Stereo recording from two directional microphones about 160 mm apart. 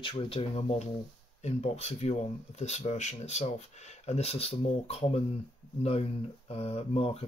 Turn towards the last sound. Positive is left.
turn(degrees=40)  # may be behind; listen again after turning